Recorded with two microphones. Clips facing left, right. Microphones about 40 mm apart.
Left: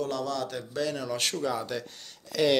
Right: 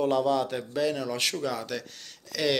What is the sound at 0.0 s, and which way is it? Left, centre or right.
Speech, centre.